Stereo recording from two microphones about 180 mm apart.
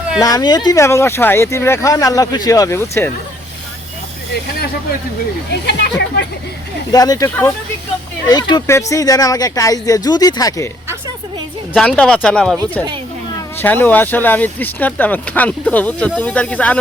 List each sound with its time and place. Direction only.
0.2 s speech: 20° left (ahead or behind)
5.5 s speech: 65° left (ahead or behind)
6.9 s speech: 20° left (ahead or behind)
8.3 s speech: 25° left (ahead or behind)
11.7 s speech: 5° left (ahead or behind)
13.6 s speech: 10° left (ahead or behind)